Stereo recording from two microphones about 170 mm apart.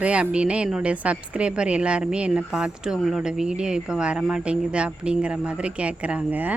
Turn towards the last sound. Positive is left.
turn(degrees=-10)  # may be behind; listen again after turning